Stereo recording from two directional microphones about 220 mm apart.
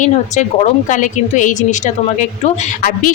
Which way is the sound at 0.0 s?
35° left (ahead or behind).